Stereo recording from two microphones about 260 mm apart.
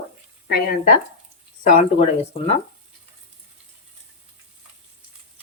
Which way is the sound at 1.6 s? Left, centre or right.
Left.